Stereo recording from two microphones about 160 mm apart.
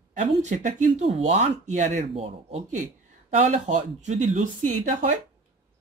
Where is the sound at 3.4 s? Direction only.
50° right (ahead or behind).